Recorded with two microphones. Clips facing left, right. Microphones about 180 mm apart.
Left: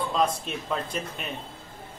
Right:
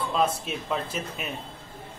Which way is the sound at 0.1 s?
5° right (ahead or behind).